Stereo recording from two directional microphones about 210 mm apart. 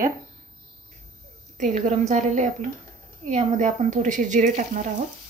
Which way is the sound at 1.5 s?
35° right (ahead or behind).